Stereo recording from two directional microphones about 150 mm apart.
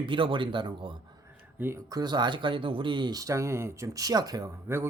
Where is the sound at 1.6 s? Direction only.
15° right (ahead or behind).